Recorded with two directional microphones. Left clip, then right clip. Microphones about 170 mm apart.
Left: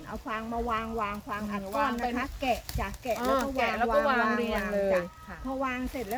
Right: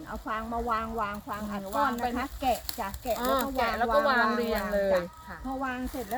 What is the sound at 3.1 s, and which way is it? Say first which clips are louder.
Speech: even; 20° right (ahead or behind).